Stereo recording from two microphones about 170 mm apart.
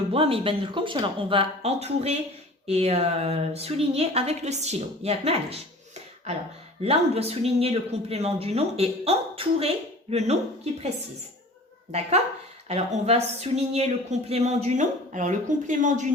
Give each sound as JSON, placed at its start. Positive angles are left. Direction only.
{"t": 0.1, "sound": "speech", "side_deg": -35}
{"t": 11.9, "sound": "speech", "side_deg": -40}